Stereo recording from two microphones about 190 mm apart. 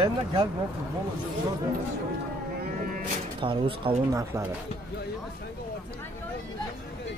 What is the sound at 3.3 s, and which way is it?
Speech, 25° right (ahead or behind).